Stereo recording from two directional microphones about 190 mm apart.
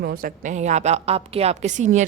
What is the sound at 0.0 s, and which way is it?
A woman's voice, 50° right (ahead or behind).